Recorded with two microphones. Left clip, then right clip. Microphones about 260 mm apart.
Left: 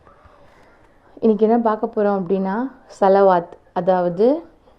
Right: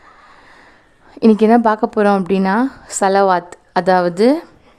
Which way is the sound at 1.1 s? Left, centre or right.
Right.